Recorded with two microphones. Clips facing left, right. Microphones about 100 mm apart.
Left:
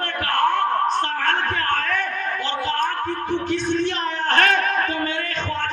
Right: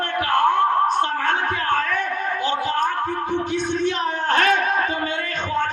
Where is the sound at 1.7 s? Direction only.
50° left (ahead or behind).